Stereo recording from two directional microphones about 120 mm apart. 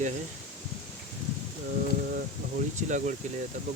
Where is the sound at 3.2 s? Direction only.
80° right.